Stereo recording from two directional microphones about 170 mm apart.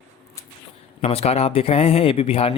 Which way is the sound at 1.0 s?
35° left (ahead or behind).